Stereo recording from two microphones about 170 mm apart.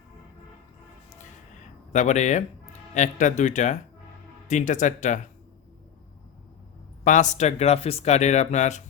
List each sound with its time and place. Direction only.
1.9 s speech: 45° left (ahead or behind)
7.0 s speech: 45° left (ahead or behind)